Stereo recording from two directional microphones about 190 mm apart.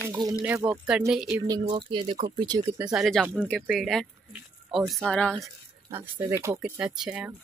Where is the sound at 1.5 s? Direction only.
25° right (ahead or behind).